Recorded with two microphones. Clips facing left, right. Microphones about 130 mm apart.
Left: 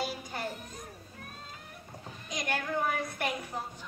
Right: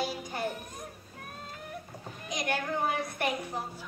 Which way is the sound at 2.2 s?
15° right (ahead or behind).